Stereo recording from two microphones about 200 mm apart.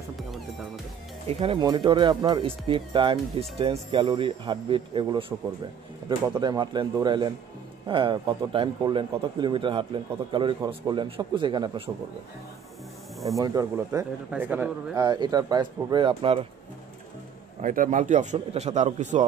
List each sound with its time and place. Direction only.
1.4 s speech: 25° right (ahead or behind)
13.4 s speech: 15° right (ahead or behind)
15.0 s speech: 20° right (ahead or behind)
17.6 s speech: 40° right (ahead or behind)